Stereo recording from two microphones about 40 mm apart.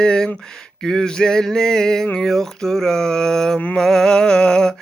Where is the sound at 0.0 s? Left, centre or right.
Left.